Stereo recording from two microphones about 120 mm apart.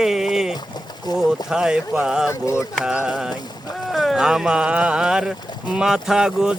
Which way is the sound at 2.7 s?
5° right (ahead or behind).